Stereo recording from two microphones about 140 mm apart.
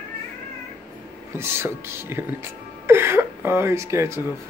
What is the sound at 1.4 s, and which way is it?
Speech, 15° right (ahead or behind).